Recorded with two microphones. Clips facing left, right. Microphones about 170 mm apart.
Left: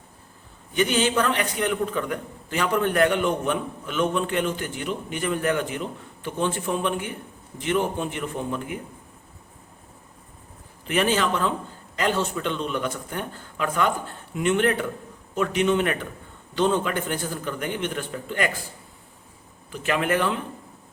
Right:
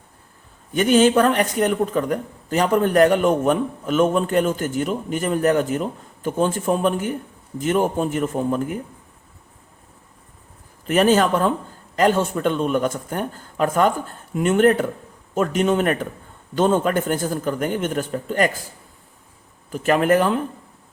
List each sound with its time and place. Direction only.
0.7 s speech: 45° right (ahead or behind)
10.8 s speech: 45° right (ahead or behind)
19.7 s speech: 45° right (ahead or behind)